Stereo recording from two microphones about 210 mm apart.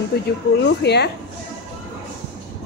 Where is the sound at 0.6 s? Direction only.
55° left (ahead or behind).